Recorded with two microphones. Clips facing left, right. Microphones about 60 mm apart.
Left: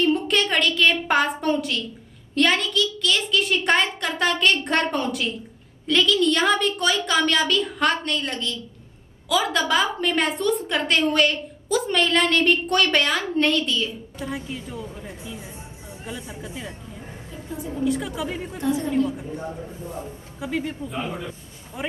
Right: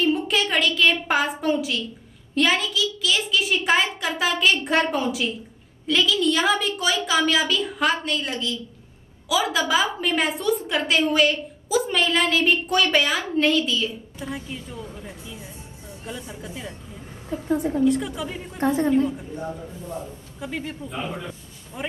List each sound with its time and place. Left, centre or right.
0.0 s a woman's voice: centre
17.3 s a woman's voice: right
17.8 s a woman's voice: centre
18.6 s a woman's voice: right
20.3 s a man's voice: centre